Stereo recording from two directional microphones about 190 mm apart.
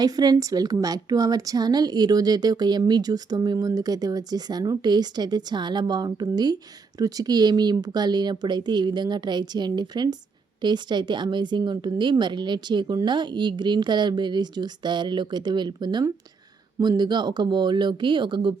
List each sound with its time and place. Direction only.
0.0 s a woman's voice: 20° right (ahead or behind)